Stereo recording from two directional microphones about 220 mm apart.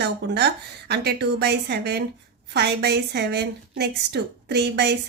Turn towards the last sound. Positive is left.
turn(degrees=-50)  # may be behind; listen again after turning